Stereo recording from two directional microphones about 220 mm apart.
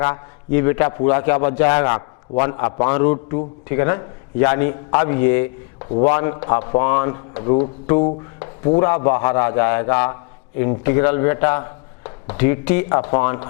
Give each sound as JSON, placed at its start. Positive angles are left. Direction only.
{"t": 0.0, "sound": "speech", "side_deg": 15}
{"t": 1.9, "sound": "a man's voice", "side_deg": 25}